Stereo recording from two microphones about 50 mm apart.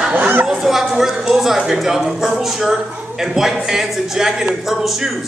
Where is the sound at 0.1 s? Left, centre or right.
Right.